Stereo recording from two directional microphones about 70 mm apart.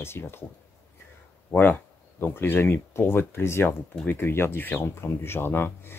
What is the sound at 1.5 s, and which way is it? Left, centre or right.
Speech, left.